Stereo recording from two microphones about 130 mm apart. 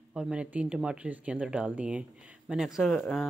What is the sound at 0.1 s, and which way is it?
Speech, 5° right (ahead or behind).